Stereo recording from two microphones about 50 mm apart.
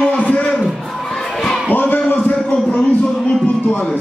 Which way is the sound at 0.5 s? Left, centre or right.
Centre.